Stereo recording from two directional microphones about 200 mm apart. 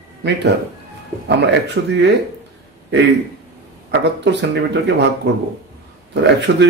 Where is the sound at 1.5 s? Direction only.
55° right (ahead or behind).